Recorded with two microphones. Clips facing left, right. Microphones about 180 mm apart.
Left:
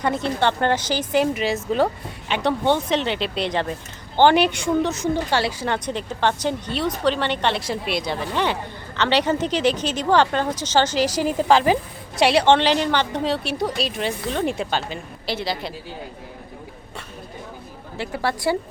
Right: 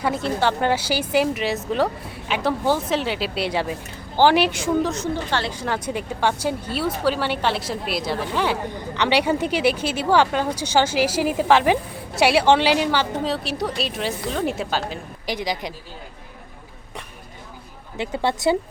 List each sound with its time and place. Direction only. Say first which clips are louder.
0.0 s a woman's voice: even; 5° right (ahead or behind)
4.9 s a woman's voice: left 3 dB; 10° left (ahead or behind)
5.6 s speech: even; 5° right (ahead or behind)
15.3 s speech: even; 15° right (ahead or behind)
17.9 s a woman's voice: right 2 dB; 20° right (ahead or behind)